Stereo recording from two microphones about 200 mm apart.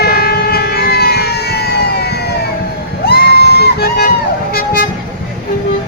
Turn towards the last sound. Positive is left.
turn(degrees=50)  # may be behind; listen again after turning